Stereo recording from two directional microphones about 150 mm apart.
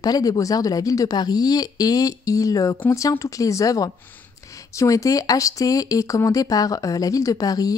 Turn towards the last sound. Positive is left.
turn(degrees=25)  # may be behind; listen again after turning